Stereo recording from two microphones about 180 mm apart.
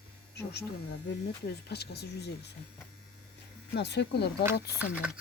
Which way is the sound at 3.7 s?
70° left (ahead or behind).